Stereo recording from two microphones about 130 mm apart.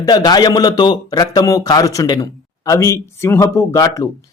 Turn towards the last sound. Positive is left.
turn(degrees=25)  # may be behind; listen again after turning